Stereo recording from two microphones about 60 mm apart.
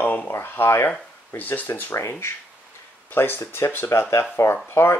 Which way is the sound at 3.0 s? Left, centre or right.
Left.